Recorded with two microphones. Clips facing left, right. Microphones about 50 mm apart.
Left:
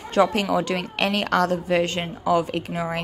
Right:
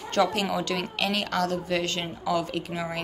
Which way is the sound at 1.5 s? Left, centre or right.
Left.